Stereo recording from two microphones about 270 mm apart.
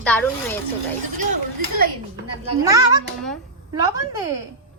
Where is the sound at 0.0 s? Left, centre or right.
Centre.